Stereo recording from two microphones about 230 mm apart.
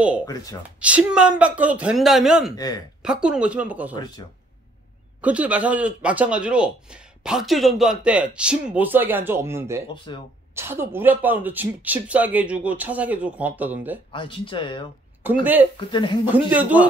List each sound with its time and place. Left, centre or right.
0.2 s speech: centre
0.7 s a man's voice: centre
2.5 s speech: centre
3.0 s a man's voice: centre
3.9 s speech: centre
5.2 s a man's voice: centre
10.1 s speech: centre
10.5 s speech: centre
14.1 s speech: left
15.4 s speech: centre
15.9 s speech: left
16.3 s speech: centre